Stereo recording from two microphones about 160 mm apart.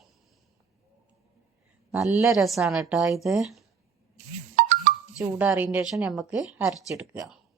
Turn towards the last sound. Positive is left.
turn(degrees=-5)  # may be behind; listen again after turning